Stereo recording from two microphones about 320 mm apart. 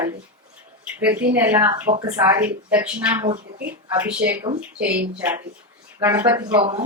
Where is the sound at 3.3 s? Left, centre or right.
Right.